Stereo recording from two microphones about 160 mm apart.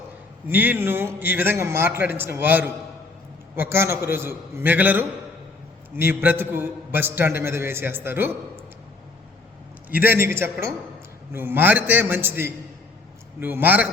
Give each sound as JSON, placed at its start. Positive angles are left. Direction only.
{"t": 0.4, "sound": "a man's voice", "side_deg": -10}
{"t": 9.9, "sound": "a man's voice", "side_deg": -10}